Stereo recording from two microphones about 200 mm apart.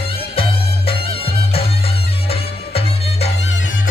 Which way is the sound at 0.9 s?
30° left (ahead or behind).